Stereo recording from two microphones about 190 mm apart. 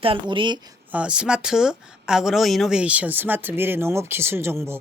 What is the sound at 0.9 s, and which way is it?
A woman's voice, 5° right (ahead or behind).